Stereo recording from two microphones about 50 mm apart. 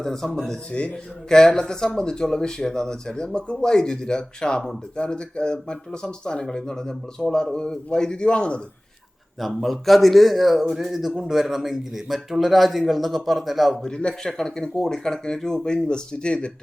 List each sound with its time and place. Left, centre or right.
0.0 s speech: centre
9.4 s a man's voice: centre
13.8 s speech: centre